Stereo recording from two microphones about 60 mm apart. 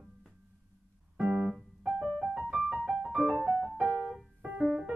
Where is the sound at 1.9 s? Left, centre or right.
Centre.